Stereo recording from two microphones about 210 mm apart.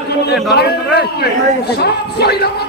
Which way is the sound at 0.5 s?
50° left (ahead or behind).